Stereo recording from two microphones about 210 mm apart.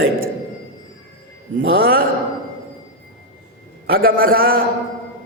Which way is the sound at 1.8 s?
45° right (ahead or behind).